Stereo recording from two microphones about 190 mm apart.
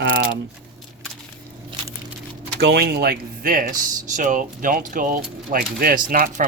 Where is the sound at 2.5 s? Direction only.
60° right (ahead or behind).